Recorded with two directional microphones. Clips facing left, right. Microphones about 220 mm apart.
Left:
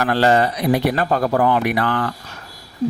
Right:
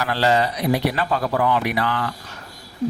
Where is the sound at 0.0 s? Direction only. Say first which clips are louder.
Left 4 dB; 50° left (ahead or behind).